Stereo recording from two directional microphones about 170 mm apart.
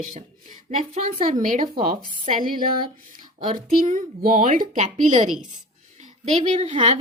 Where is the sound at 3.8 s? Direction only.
50° right (ahead or behind).